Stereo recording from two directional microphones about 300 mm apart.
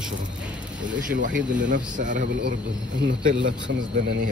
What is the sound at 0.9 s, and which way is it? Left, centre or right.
Speech, right.